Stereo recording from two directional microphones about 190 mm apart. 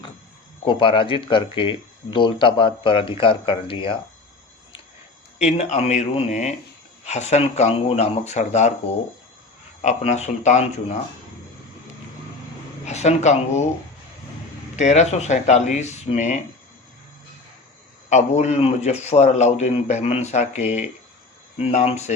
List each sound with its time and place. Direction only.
0.6 s speech: 25° left (ahead or behind)
5.4 s a man's voice: 35° left (ahead or behind)
9.8 s a man's voice: 35° left (ahead or behind)
12.8 s a man's voice: 35° left (ahead or behind)
14.8 s a man's voice: 35° left (ahead or behind)
18.1 s a man's voice: 35° left (ahead or behind)